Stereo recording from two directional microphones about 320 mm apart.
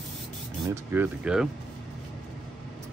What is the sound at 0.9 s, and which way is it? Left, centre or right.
Speech, centre.